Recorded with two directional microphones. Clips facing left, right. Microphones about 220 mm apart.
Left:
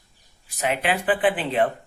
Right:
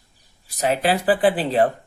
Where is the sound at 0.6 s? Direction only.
40° right (ahead or behind).